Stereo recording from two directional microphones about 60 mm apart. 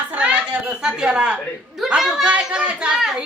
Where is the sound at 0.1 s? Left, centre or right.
Right.